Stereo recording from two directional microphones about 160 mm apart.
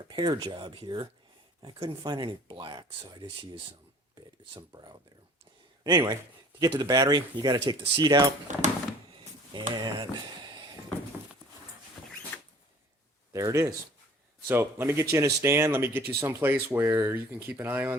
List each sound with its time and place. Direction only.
0.1 s speech: 30° right (ahead or behind)
9.5 s speech: 30° right (ahead or behind)
12.3 s zipper: 10° left (ahead or behind)
13.3 s speech: 20° right (ahead or behind)